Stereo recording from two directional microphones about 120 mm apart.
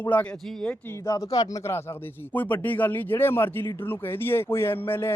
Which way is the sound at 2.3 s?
15° left (ahead or behind).